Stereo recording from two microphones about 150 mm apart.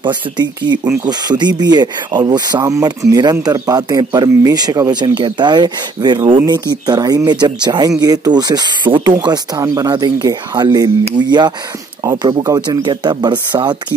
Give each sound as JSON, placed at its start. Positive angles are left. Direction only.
{"t": 0.0, "sound": "speech", "side_deg": -30}